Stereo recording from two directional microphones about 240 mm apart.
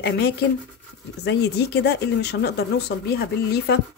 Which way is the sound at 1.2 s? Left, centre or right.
Left.